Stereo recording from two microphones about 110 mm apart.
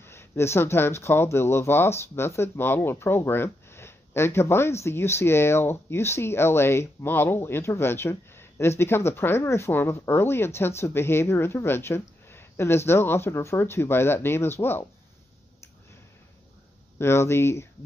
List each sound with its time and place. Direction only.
0.0 s speech: 25° left (ahead or behind)
17.0 s speech: 25° left (ahead or behind)